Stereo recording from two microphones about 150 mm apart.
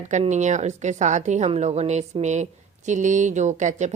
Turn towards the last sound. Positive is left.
turn(degrees=-50)  # may be behind; listen again after turning